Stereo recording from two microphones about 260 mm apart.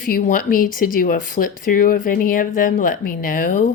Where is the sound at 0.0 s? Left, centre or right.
Left.